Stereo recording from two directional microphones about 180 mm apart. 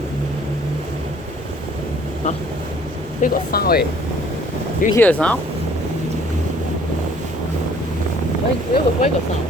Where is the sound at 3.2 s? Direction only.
55° left (ahead or behind).